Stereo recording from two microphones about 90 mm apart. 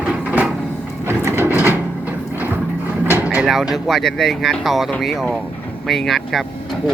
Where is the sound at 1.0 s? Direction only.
25° right (ahead or behind).